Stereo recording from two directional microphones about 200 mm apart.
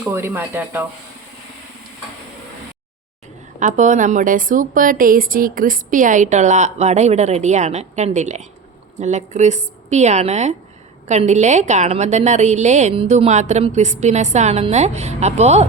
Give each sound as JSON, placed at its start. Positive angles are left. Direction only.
{"t": 0.0, "sound": "speech", "side_deg": -10}
{"t": 3.6, "sound": "a woman's voice", "side_deg": -40}